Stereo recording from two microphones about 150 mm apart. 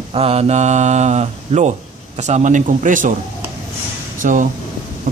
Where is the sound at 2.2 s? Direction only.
50° right (ahead or behind).